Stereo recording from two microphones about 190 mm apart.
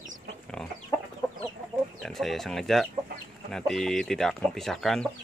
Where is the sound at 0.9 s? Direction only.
20° left (ahead or behind).